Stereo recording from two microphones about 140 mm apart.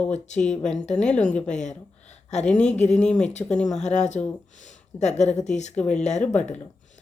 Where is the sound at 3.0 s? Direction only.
5° left (ahead or behind).